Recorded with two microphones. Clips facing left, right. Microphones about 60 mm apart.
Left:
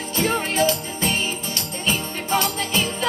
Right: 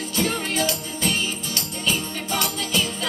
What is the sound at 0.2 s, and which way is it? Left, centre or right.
Music, left.